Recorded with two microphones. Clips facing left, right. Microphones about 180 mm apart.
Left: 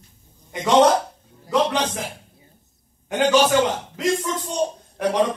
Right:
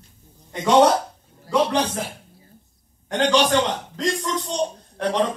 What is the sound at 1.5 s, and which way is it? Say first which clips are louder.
Speech: even; 20° left (ahead or behind).